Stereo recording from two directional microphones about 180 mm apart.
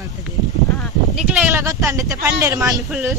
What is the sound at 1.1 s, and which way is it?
Speech, 10° right (ahead or behind).